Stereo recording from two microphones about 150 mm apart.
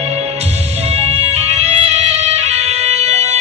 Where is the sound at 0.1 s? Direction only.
45° right (ahead or behind).